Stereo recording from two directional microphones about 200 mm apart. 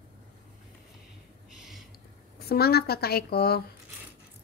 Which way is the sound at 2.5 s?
50° left (ahead or behind).